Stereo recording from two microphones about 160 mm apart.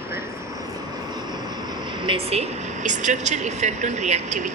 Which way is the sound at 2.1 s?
40° right (ahead or behind).